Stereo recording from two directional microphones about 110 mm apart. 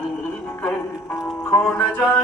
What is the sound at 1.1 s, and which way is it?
Music, 30° left (ahead or behind).